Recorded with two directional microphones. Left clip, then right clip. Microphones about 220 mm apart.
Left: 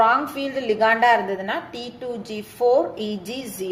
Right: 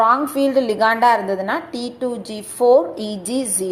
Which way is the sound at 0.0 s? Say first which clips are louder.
Right 3 dB; 25° right (ahead or behind).